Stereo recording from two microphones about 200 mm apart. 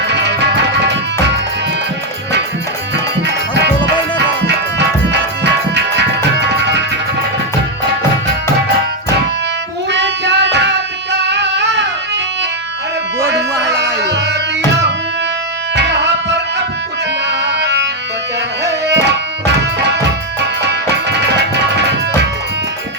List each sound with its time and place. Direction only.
0.1 s music: 60° right (ahead or behind)
3.2 s music: 60° right (ahead or behind)
9.9 s music: 60° right (ahead or behind)
13.3 s music: 60° right (ahead or behind)
15.7 s tabla: 60° right (ahead or behind)
17.2 s music: 60° right (ahead or behind)
18.9 s tabla: 60° right (ahead or behind)